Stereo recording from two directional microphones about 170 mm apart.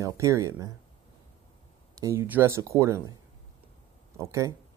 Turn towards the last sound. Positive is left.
turn(degrees=-20)  # may be behind; listen again after turning